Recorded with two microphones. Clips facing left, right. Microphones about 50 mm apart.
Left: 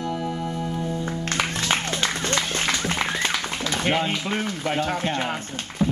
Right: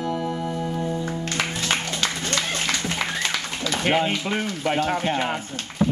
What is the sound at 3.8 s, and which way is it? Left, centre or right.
Speech, centre.